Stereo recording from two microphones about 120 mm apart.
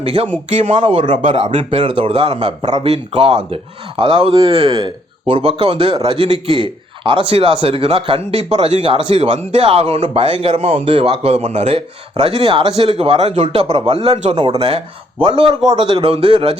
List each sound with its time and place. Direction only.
0.0 s a man's voice: 55° right (ahead or behind)
1.1 s a man's voice: 65° right (ahead or behind)